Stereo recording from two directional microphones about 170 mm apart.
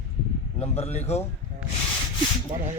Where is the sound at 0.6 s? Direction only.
40° left (ahead or behind).